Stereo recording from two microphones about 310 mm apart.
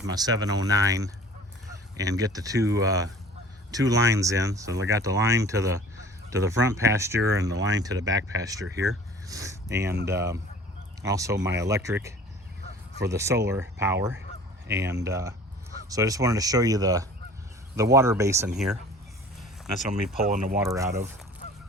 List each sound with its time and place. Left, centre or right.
0.1 s speech: centre
20.1 s speech: right
20.6 s speech: centre